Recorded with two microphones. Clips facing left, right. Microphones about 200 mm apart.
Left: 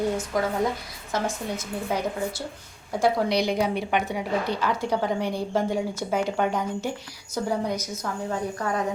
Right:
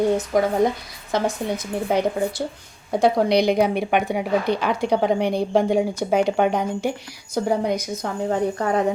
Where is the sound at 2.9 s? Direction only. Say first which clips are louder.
Right 5 dB; 15° right (ahead or behind).